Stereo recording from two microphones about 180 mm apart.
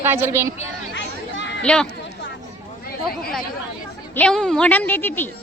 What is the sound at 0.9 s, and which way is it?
Chatter, 75° left (ahead or behind).